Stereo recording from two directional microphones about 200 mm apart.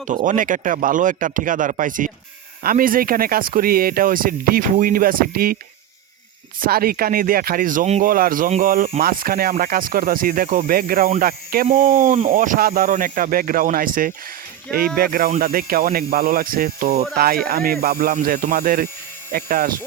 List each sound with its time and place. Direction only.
0.1 s speech: 40° right (ahead or behind)
6.6 s speech: 50° right (ahead or behind)